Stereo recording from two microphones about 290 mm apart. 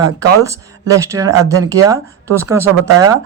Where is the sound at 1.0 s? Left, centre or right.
Centre.